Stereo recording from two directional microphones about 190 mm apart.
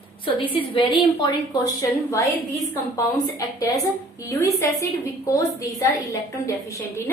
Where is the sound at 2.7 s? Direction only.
20° left (ahead or behind).